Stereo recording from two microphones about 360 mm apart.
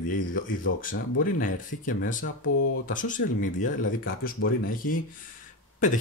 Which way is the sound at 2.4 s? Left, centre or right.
Left.